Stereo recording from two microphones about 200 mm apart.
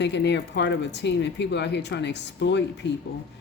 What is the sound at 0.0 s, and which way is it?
Speech, 60° left (ahead or behind).